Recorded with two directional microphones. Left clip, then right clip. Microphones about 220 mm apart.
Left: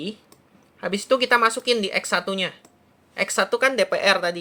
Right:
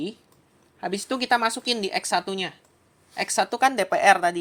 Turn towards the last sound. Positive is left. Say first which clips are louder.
# right 2 dB
turn(degrees=-35)  # may be behind; listen again after turning